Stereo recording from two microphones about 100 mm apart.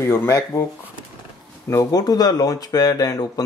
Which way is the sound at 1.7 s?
40° left (ahead or behind).